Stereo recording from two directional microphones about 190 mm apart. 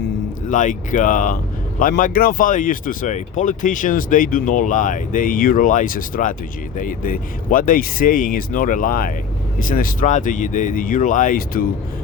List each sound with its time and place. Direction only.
0.4 s speech: 40° left (ahead or behind)